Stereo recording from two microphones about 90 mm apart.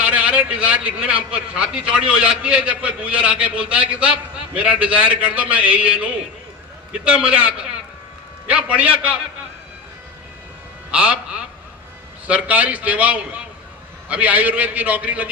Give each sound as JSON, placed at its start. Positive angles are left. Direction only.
{"t": 0.0, "sound": "a man's voice", "side_deg": -15}
{"t": 10.9, "sound": "a man's voice", "side_deg": -10}
{"t": 12.3, "sound": "a man's voice", "side_deg": -15}